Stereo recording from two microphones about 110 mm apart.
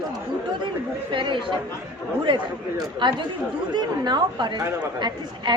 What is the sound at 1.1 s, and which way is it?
A woman's voice, 50° right (ahead or behind).